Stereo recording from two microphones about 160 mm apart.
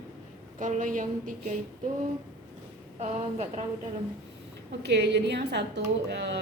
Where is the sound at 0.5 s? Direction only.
50° right (ahead or behind).